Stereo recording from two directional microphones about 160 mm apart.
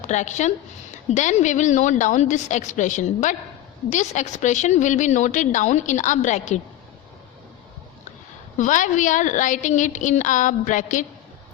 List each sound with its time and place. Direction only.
0.1 s a woman's voice: 50° left (ahead or behind)
8.5 s a woman's voice: 50° left (ahead or behind)